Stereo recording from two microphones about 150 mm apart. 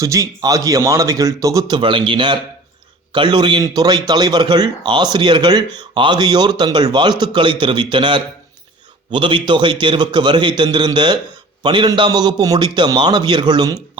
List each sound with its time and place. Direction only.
0.0 s a man's voice: 20° right (ahead or behind)